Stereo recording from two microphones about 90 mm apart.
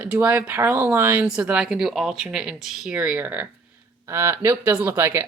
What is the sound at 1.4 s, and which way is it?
Speech, 10° right (ahead or behind).